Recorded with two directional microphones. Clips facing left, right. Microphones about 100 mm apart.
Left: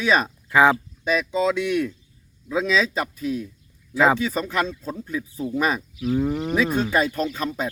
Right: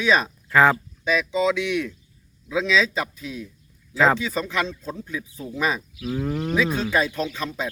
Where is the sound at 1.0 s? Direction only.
45° left (ahead or behind).